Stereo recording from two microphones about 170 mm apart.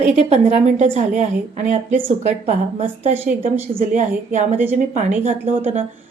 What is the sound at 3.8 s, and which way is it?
A woman's voice, 50° right (ahead or behind).